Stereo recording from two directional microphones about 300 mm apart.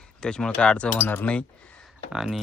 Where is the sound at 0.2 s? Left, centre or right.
Centre.